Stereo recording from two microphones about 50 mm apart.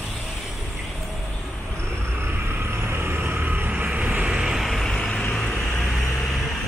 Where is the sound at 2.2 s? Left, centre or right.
Right.